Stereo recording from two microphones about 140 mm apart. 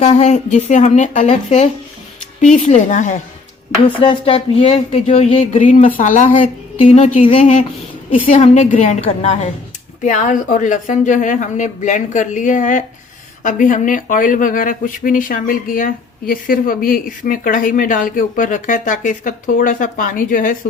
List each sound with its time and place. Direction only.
0.0 s speech: 55° left (ahead or behind)
3.8 s speech: 35° left (ahead or behind)
5.6 s speech: 65° left (ahead or behind)
8.1 s a woman's voice: 40° left (ahead or behind)
8.4 s speech: 60° left (ahead or behind); by 20.6 s 80° left